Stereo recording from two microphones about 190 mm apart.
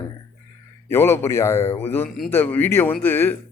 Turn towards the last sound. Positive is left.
turn(degrees=10)  # may be behind; listen again after turning